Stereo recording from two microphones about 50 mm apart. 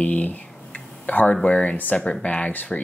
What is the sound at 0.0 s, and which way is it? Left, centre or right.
Speech, left.